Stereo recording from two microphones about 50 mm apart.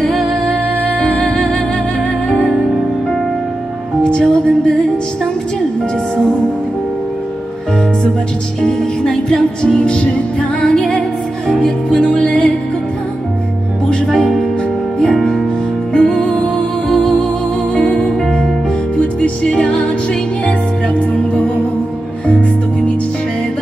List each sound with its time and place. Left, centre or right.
0.1 s music: centre
0.5 s music: left
4.0 s music: centre
8.6 s music: centre
14.0 s music: centre
15.9 s music: centre
17.7 s music: left
18.9 s music: left